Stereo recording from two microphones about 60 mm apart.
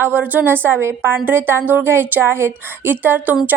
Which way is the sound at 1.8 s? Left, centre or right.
Right.